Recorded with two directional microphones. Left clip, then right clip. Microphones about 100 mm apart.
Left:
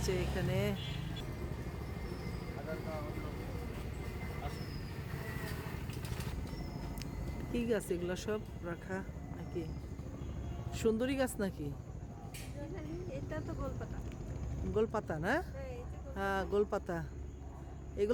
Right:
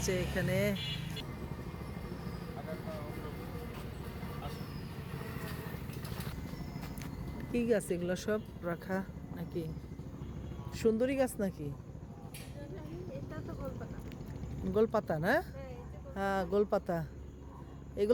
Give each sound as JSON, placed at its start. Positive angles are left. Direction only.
{"t": 0.0, "sound": "speech", "side_deg": -25}
{"t": 7.5, "sound": "speech", "side_deg": -15}
{"t": 8.6, "sound": "speech", "side_deg": -40}
{"t": 10.8, "sound": "speech", "side_deg": -5}
{"t": 14.7, "sound": "speech", "side_deg": -35}